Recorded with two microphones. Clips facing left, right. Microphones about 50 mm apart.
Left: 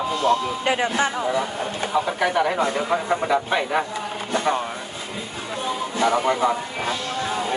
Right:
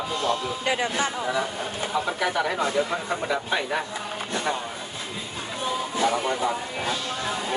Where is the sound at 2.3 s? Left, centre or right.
Left.